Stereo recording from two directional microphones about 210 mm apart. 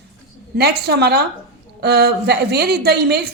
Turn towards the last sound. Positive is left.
turn(degrees=-50)  # may be behind; listen again after turning